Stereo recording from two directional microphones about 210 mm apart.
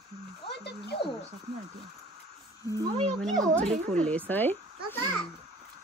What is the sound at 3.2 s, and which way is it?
A woman's voice, centre (ahead or behind).